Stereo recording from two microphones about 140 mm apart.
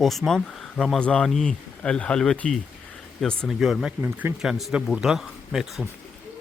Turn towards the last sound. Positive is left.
turn(degrees=0)  # may be behind; listen again after turning